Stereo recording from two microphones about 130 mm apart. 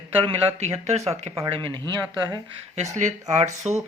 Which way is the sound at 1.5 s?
35° right (ahead or behind).